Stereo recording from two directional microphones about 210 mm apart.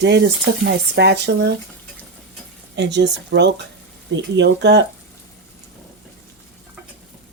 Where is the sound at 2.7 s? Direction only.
55° right (ahead or behind).